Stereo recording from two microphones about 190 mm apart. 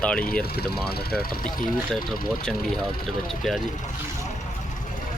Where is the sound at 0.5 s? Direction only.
55° left (ahead or behind).